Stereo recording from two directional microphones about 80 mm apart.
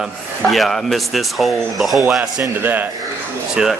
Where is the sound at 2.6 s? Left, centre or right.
Right.